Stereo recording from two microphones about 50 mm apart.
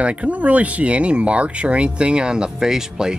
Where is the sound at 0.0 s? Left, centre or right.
Right.